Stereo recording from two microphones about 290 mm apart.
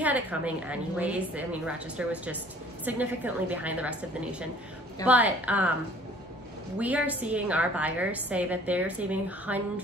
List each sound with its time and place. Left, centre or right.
0.0 s a woman's voice: centre
6.8 s a woman's voice: centre